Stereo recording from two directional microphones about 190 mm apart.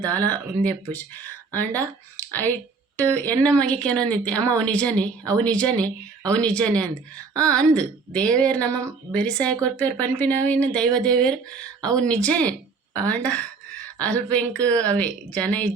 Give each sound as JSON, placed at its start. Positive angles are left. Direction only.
{"t": 0.0, "sound": "speech", "side_deg": 10}
{"t": 5.2, "sound": "speech", "side_deg": -20}
{"t": 5.5, "sound": "a woman's voice", "side_deg": 5}